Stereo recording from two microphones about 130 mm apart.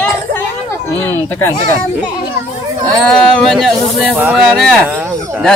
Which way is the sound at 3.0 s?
5° left (ahead or behind).